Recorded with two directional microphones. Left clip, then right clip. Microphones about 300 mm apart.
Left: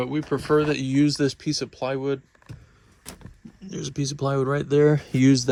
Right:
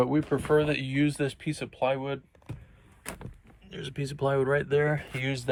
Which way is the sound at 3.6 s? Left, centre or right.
Left.